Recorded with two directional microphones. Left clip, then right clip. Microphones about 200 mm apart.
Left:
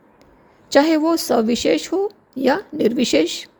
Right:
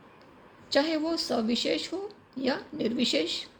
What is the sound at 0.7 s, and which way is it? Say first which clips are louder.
A woman's voice: left 11 dB; 50° left (ahead or behind).